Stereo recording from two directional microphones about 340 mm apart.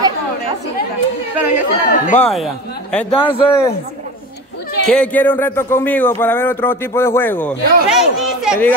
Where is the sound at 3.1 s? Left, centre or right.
Centre.